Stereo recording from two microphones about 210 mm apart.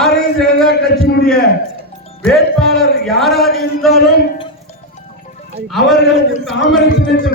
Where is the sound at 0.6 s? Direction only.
45° left (ahead or behind).